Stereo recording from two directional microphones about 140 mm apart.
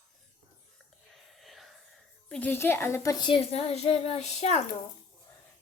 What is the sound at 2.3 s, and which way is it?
Speech, 15° left (ahead or behind).